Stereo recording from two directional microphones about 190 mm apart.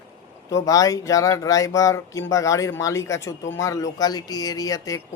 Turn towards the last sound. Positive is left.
turn(degrees=20)  # may be behind; listen again after turning